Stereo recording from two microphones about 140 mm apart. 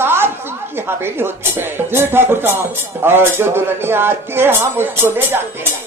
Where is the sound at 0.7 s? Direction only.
15° right (ahead or behind).